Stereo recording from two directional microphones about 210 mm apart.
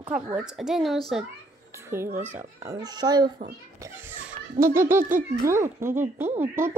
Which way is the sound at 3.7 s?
10° right (ahead or behind).